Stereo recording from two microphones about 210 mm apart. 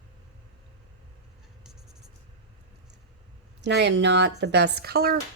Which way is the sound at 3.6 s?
55° right (ahead or behind).